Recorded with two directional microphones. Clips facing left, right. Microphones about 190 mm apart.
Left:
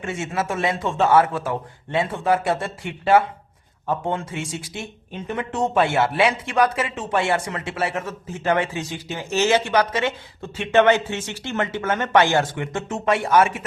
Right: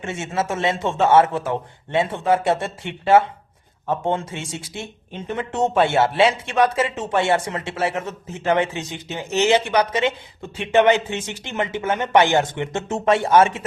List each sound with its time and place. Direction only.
0.0 s speech: 25° right (ahead or behind)